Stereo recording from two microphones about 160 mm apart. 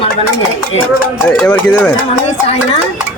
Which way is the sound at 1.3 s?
5° left (ahead or behind).